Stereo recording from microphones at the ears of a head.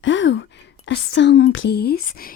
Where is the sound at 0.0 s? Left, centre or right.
Left.